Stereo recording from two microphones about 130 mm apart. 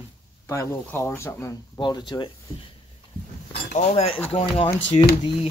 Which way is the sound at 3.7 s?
65° left (ahead or behind).